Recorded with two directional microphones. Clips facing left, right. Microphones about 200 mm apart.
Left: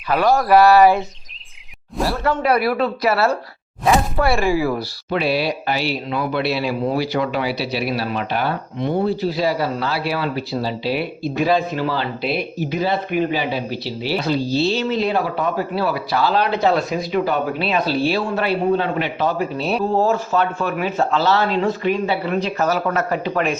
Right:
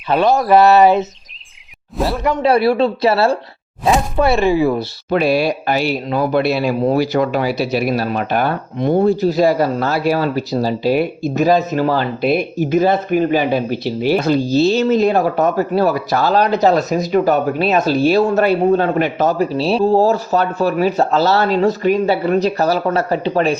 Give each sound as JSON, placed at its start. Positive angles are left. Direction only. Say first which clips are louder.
{"t": 0.1, "sound": "speech", "louder": "right 2 dB", "side_deg": -20}
{"t": 2.2, "sound": "speech", "louder": "right 4 dB", "side_deg": -15}
{"t": 2.5, "sound": "speech", "louder": "right 7 dB", "side_deg": -30}
{"t": 5.1, "sound": "speech", "louder": "right 5 dB", "side_deg": -45}